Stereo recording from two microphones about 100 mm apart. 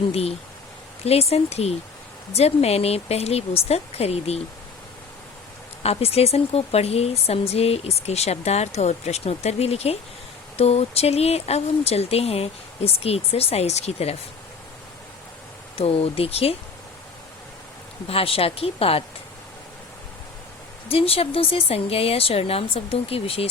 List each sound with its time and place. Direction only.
0.1 s speech: 90° left
5.8 s speech: 90° left
15.7 s speech: 75° left (ahead or behind)
18.1 s speech: 75° left (ahead or behind)
20.8 s speech: 70° left (ahead or behind)